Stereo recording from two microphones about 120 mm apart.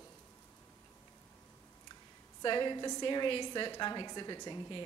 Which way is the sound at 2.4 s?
40° left (ahead or behind).